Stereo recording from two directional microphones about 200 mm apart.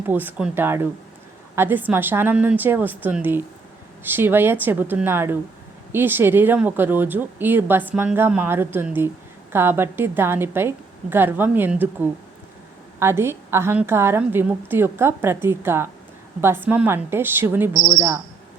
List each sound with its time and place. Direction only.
0.1 s speech: 10° right (ahead or behind)